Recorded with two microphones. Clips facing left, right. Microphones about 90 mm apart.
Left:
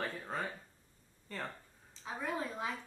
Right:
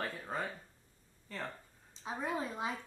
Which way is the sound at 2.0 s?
20° right (ahead or behind).